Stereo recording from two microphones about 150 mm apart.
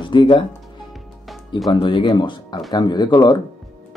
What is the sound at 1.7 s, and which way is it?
Speech, 35° left (ahead or behind).